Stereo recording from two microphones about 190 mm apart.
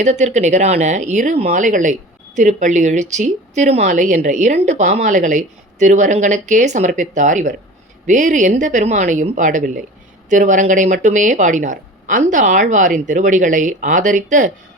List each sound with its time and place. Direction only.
0.0 s speech: 35° right (ahead or behind)